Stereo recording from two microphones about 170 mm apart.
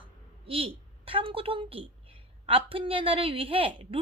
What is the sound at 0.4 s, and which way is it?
A woman's voice, 35° right (ahead or behind).